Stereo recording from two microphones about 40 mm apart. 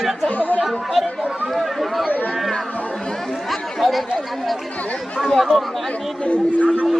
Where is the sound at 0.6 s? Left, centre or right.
Centre.